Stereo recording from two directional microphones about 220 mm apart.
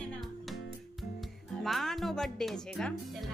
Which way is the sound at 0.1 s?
Centre (ahead or behind).